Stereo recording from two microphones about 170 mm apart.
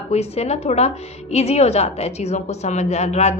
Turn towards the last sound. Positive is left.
turn(degrees=40)  # may be behind; listen again after turning